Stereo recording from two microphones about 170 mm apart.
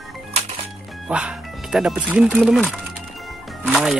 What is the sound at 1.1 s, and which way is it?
Speech, 5° right (ahead or behind).